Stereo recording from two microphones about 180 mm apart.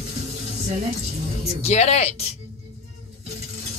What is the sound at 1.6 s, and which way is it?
Speech, 40° left (ahead or behind).